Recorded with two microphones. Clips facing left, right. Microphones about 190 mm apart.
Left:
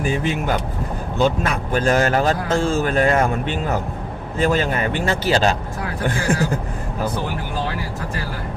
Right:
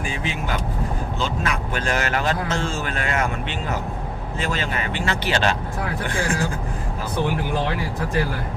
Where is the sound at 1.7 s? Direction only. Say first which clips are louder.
Left 9 dB; 40° left (ahead or behind).